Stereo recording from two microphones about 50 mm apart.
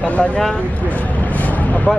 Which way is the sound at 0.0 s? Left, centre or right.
Left.